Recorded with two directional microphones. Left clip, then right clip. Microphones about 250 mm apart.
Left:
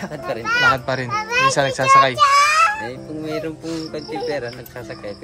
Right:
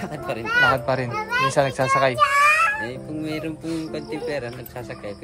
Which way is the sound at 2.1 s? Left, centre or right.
Centre.